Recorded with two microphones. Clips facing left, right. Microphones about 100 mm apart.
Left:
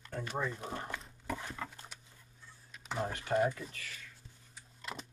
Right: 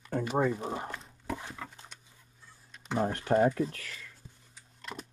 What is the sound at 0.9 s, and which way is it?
Dog, 5° right (ahead or behind).